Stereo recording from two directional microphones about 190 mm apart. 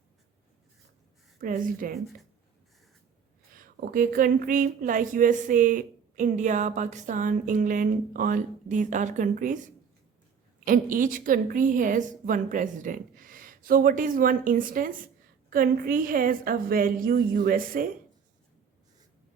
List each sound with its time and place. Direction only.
1.4 s a woman's voice: 45° right (ahead or behind)
1.9 s speech: centre (ahead or behind)
3.5 s a woman's voice: 45° right (ahead or behind)
10.7 s a woman's voice: 45° right (ahead or behind)